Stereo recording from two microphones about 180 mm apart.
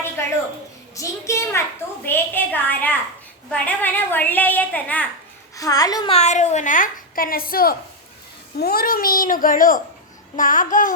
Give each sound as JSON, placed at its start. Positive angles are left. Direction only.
{"t": 0.2, "sound": "a sound", "side_deg": 15}
{"t": 0.9, "sound": "a child's voice", "side_deg": 15}
{"t": 5.5, "sound": "a child's voice", "side_deg": 20}
{"t": 6.1, "sound": "a woman's voice", "side_deg": 40}